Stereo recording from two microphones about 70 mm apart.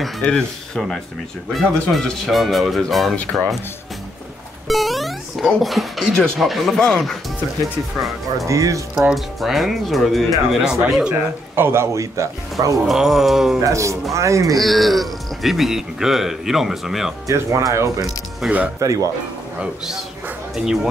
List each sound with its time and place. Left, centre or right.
0.0 s speech: centre
4.6 s speech: centre
8.5 s speech: right
9.1 s speech: centre
11.5 s speech: right
12.8 s speech: centre
13.6 s speech: right
14.6 s speech: centre
17.3 s speech: right
18.4 s speech: centre
18.8 s speech: right
19.6 s speech: centre